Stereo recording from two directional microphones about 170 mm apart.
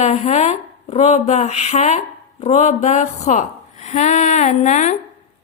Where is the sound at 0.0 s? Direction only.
40° left (ahead or behind).